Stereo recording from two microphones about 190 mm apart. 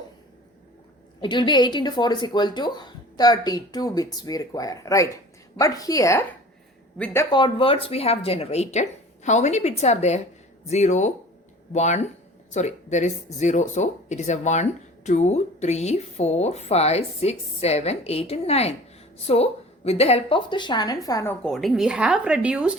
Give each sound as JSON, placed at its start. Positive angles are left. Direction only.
{"t": 1.2, "sound": "a woman's voice", "side_deg": 25}
{"t": 21.4, "sound": "speech", "side_deg": 0}